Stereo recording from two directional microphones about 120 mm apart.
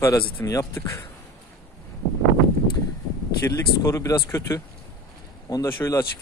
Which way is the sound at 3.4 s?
25° left (ahead or behind).